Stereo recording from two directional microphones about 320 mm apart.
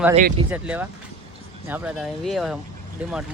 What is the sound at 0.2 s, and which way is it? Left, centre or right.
Speech, right.